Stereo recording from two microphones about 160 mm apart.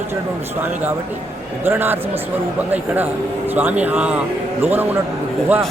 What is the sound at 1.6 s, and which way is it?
A man's voice, 15° right (ahead or behind).